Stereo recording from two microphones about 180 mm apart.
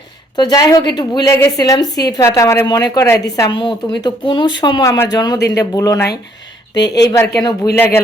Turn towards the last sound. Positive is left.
turn(degrees=15)  # may be behind; listen again after turning